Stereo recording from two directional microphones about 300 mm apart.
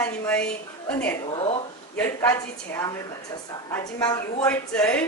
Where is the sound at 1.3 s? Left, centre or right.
Centre.